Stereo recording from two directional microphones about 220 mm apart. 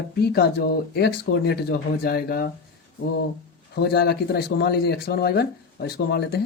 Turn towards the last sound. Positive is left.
turn(degrees=45)  # may be behind; listen again after turning